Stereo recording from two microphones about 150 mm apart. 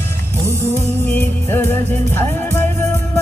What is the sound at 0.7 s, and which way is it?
Music, 15° left (ahead or behind).